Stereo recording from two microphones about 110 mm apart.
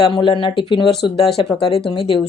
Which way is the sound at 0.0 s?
50° left (ahead or behind).